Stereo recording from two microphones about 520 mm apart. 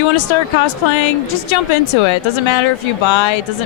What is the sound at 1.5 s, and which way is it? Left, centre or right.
A woman's voice, left.